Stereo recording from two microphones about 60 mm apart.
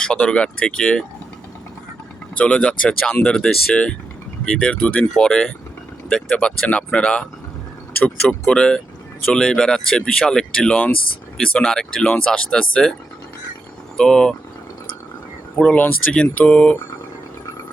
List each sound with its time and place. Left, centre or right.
0.0 s speech: centre
2.3 s speech: left
13.9 s speech: centre
15.6 s speech: left